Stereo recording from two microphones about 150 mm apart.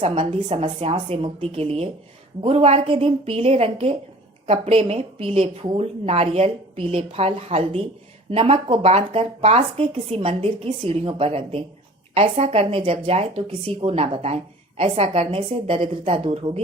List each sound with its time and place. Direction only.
0.0 s a woman's voice: 40° right (ahead or behind)